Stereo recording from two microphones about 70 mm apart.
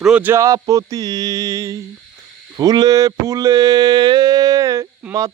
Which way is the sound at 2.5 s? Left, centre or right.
Right.